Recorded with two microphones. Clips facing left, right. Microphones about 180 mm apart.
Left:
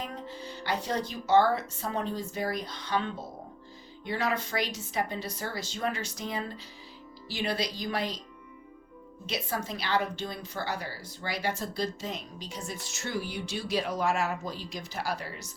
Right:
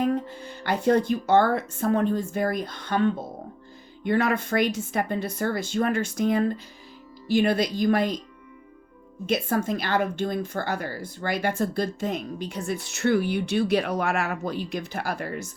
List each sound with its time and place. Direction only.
0.0 s speech: 55° right (ahead or behind)
9.2 s speech: 50° right (ahead or behind)